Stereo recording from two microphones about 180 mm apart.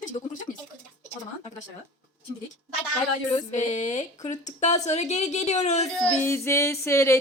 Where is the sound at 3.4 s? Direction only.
40° left (ahead or behind).